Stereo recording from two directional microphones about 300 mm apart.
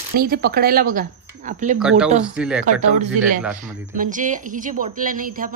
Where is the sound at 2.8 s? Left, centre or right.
Right.